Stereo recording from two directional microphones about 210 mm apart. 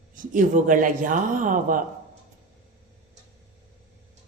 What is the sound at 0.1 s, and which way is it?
A woman's voice, 40° right (ahead or behind).